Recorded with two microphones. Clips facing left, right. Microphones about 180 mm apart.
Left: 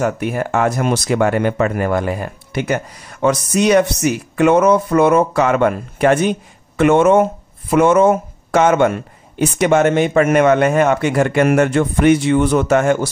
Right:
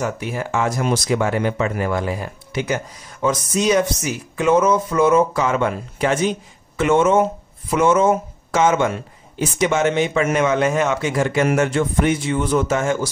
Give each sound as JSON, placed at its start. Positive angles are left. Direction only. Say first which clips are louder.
{"t": 0.0, "sound": "speech", "louder": "left 5 dB", "side_deg": 55}